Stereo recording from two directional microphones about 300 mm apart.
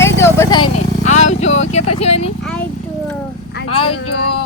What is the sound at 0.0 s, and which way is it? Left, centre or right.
Vehicle, centre.